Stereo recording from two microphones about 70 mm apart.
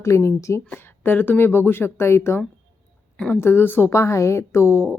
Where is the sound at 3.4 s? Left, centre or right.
Left.